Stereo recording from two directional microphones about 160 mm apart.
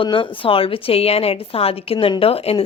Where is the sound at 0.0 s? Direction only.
30° left (ahead or behind).